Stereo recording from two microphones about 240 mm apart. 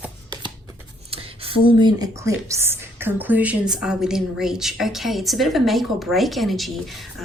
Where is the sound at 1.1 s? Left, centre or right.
Right.